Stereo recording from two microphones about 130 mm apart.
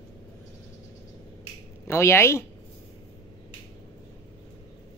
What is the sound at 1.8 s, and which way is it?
Speech, 20° left (ahead or behind).